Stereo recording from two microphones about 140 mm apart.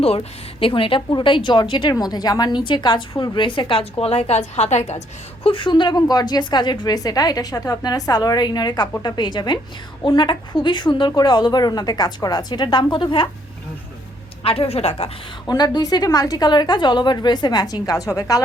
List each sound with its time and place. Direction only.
0.0 s a woman's voice: 45° left (ahead or behind)
14.4 s a woman's voice: 45° left (ahead or behind)
15.4 s a woman's voice: 30° left (ahead or behind)